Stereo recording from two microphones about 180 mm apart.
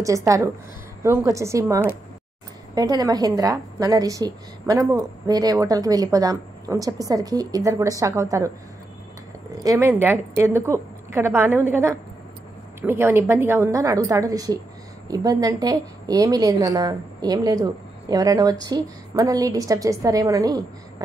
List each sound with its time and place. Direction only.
0.0 s a woman's voice: 15° right (ahead or behind)
9.6 s a woman's voice: 15° right (ahead or behind)
12.8 s a woman's voice: 15° right (ahead or behind)